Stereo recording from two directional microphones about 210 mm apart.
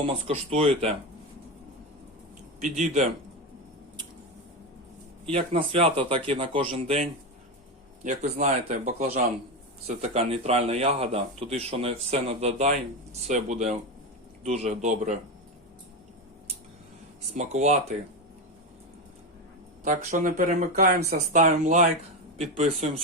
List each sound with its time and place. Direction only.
0.3 s a man's voice: 30° right (ahead or behind)
2.6 s speech: 35° right (ahead or behind)
5.3 s a man's voice: 30° right (ahead or behind)
17.3 s speech: 35° right (ahead or behind)
19.8 s speech: 35° right (ahead or behind)